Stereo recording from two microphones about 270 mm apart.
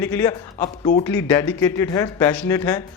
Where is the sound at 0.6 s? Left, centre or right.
Left.